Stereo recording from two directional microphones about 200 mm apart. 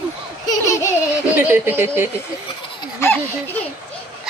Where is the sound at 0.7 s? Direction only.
15° left (ahead or behind).